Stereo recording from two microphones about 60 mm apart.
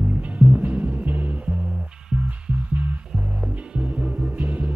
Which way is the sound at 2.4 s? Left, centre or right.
Right.